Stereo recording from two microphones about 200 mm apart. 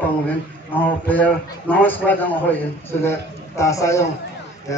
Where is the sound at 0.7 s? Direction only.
10° left (ahead or behind).